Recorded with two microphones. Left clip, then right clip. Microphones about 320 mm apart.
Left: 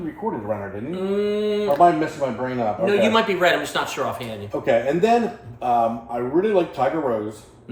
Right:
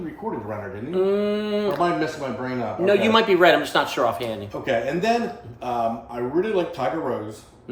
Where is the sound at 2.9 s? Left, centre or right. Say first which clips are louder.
Right 2 dB; centre.